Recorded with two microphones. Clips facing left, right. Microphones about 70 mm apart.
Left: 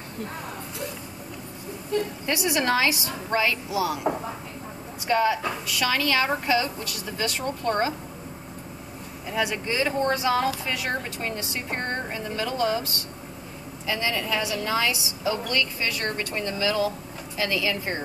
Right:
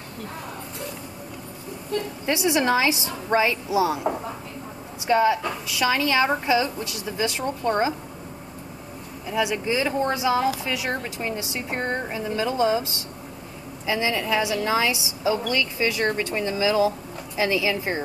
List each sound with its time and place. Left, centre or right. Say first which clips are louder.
2.2 s a woman's voice: right 6 dB; right
5.0 s a woman's voice: right 3 dB; centre
9.3 s a woman's voice: right 3 dB; centre
10.9 s a woman's voice: right 1 dB; centre
13.8 s a woman's voice: right 3 dB; centre